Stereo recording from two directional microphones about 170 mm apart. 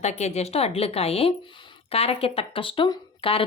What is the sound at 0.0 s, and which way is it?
Speech, 40° left (ahead or behind).